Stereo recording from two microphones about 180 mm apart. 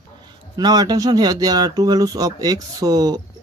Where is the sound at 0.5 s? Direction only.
20° right (ahead or behind).